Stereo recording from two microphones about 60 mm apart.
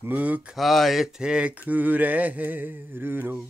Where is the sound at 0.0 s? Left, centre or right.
Right.